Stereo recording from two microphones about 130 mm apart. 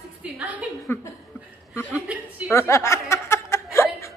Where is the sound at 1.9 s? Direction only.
10° right (ahead or behind).